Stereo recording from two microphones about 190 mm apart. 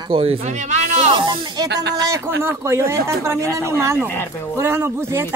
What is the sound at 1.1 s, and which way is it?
Snake, 25° right (ahead or behind).